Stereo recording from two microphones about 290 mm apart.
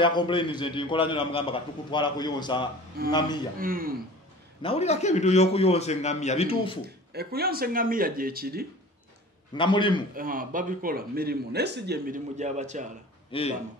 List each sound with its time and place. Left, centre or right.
0.0 s a man's voice: centre
3.5 s a man's voice: right
4.6 s a man's voice: centre
7.1 s speech: right
9.5 s a man's voice: centre
10.1 s a man's voice: right
13.3 s a man's voice: centre